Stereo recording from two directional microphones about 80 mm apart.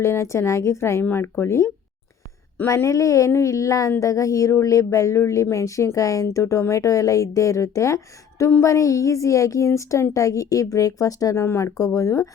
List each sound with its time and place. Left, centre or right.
0.0 s a woman's voice: left